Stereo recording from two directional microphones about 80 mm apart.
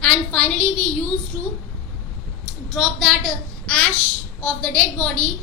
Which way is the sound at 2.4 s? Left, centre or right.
Centre.